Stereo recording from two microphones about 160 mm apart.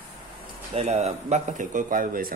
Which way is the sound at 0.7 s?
40° right (ahead or behind).